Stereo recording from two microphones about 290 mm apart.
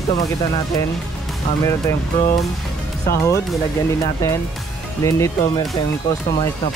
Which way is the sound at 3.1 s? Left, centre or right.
Centre.